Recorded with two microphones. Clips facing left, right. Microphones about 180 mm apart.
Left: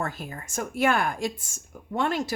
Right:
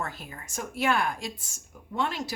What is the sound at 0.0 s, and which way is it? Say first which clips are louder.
Speech: left 4 dB; 45° left (ahead or behind).